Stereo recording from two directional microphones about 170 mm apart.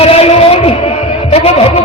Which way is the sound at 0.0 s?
35° left (ahead or behind).